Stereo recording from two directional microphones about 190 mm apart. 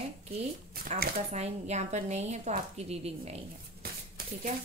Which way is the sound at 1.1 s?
35° right (ahead or behind).